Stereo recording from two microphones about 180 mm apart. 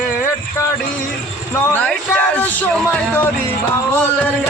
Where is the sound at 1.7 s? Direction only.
10° left (ahead or behind).